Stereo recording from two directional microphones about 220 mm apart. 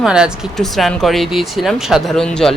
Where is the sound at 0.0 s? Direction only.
5° right (ahead or behind).